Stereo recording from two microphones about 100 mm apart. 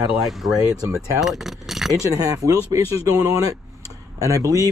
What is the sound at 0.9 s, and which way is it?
Speech, centre (ahead or behind).